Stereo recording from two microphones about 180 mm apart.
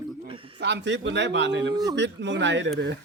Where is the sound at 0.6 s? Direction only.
70° right (ahead or behind); by 2.7 s 90° right.